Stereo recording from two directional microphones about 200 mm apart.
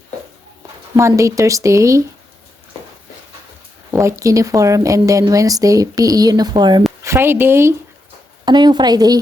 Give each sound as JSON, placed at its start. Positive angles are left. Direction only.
{"t": 0.9, "sound": "speech", "side_deg": -15}
{"t": 3.9, "sound": "a woman's voice", "side_deg": -15}